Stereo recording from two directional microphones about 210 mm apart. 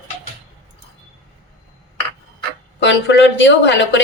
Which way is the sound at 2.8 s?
55° left (ahead or behind).